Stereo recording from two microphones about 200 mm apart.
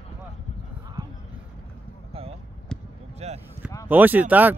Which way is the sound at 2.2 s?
30° right (ahead or behind).